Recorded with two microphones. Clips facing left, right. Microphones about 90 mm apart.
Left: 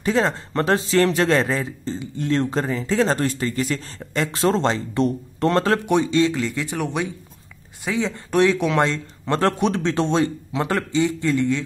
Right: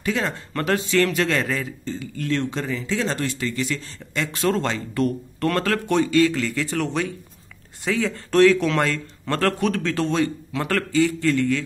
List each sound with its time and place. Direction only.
0.0 s a man's voice: 30° left (ahead or behind)